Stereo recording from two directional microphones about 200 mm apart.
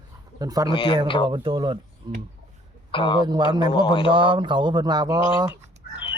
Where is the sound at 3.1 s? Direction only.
20° right (ahead or behind).